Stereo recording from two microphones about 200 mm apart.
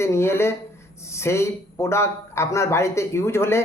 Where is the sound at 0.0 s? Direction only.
10° left (ahead or behind).